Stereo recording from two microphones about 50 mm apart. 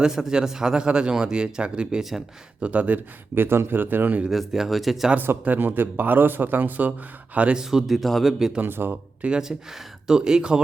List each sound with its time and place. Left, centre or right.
0.0 s a man's voice: centre; by 3.0 s right
3.3 s a man's voice: right
4.3 s speech: centre
5.5 s speech: right
7.5 s a man's voice: centre
8.6 s a man's voice: right
9.4 s a man's voice: centre